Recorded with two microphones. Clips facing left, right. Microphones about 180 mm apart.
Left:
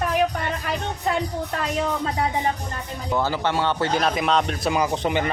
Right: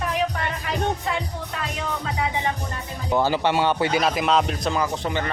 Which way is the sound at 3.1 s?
20° right (ahead or behind).